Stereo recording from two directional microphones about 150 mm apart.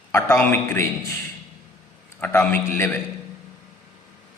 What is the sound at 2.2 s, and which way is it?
Speech, 15° left (ahead or behind).